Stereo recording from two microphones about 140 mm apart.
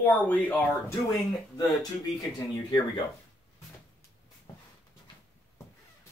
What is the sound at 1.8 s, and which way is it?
Speech, 25° left (ahead or behind).